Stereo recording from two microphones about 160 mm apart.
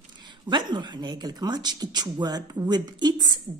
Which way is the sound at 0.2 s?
30° right (ahead or behind).